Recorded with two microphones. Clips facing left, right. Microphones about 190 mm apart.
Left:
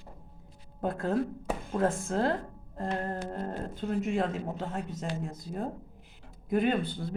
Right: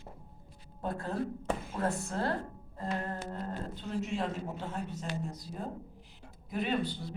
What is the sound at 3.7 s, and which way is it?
Speech, 55° left (ahead or behind).